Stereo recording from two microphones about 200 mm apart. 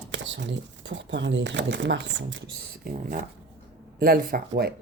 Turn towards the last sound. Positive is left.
turn(degrees=-50)  # may be behind; listen again after turning